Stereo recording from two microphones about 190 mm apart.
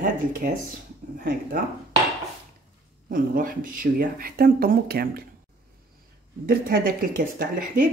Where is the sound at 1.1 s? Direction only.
50° right (ahead or behind).